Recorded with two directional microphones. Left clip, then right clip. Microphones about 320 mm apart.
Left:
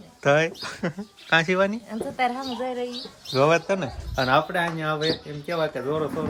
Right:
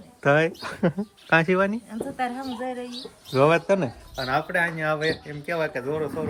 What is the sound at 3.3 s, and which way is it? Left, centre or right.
Speech, centre.